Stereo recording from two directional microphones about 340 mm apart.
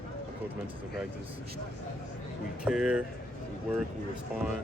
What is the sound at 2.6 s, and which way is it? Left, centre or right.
Speech, centre.